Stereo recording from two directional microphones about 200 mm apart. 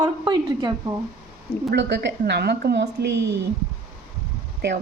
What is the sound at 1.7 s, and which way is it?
A woman's voice, 60° right (ahead or behind).